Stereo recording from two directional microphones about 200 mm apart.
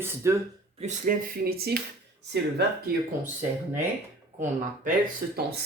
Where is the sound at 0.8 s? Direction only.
40° right (ahead or behind).